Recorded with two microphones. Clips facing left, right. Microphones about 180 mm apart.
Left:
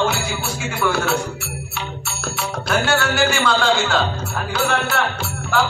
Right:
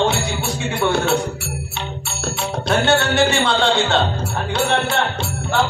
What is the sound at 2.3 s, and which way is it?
Music, 30° right (ahead or behind).